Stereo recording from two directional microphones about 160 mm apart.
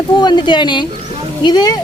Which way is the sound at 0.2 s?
30° left (ahead or behind).